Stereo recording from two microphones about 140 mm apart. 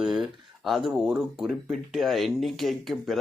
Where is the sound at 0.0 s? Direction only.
5° right (ahead or behind).